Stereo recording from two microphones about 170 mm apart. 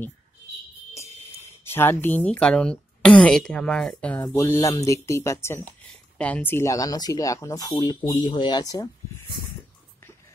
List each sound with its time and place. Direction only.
0.9 s speech: 15° left (ahead or behind)